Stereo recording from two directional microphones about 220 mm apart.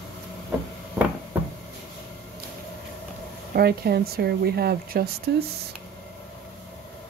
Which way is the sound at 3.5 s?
45° right (ahead or behind).